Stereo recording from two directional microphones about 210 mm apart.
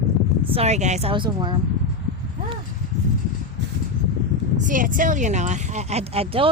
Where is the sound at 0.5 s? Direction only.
30° right (ahead or behind).